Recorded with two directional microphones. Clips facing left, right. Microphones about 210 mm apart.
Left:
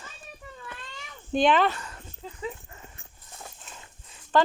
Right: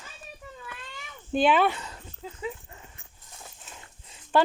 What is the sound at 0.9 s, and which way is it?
Cat, 5° right (ahead or behind).